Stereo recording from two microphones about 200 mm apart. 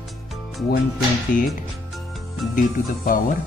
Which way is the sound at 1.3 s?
45° left (ahead or behind).